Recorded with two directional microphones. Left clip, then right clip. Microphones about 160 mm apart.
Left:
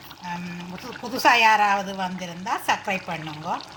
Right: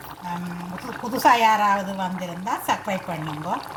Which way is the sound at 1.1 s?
15° left (ahead or behind).